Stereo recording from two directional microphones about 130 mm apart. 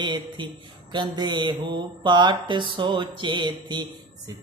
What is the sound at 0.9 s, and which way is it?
Music, 35° right (ahead or behind).